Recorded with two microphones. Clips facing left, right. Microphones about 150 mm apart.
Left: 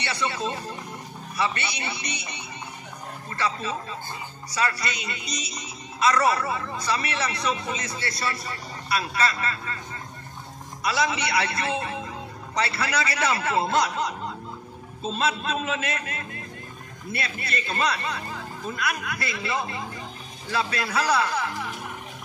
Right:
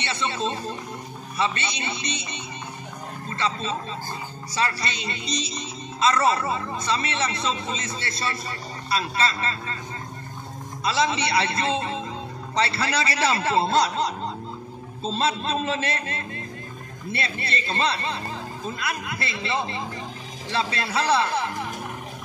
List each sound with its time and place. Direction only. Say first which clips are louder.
0.0 s a man's voice: right 1 dB; 25° right (ahead or behind)
10.8 s a man's voice: right 2 dB; 25° right (ahead or behind)